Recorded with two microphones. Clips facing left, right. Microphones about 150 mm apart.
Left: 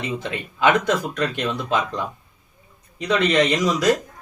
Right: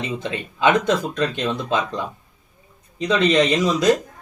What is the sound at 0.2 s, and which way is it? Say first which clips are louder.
Speech: even; 25° right (ahead or behind).